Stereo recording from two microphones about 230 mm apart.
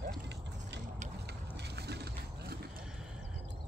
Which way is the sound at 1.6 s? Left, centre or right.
Right.